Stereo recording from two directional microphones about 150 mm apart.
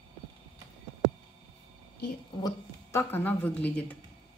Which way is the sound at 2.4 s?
25° left (ahead or behind).